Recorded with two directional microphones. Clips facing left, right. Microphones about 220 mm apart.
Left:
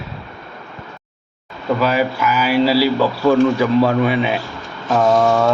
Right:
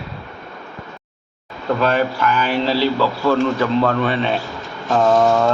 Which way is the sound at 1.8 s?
10° left (ahead or behind).